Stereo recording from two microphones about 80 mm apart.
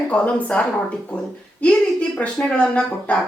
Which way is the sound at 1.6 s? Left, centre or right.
Centre.